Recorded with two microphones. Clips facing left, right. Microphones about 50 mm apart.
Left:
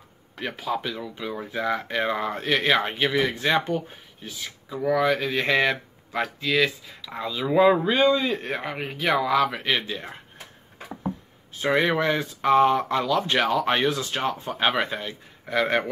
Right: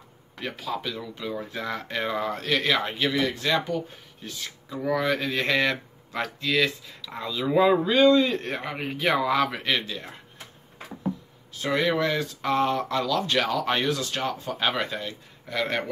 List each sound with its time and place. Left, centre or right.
0.4 s speech: centre
4.2 s speech: centre
9.8 s speech: left
11.6 s speech: left